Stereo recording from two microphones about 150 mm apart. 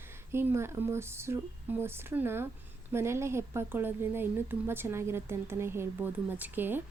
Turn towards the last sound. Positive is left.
turn(degrees=-15)  # may be behind; listen again after turning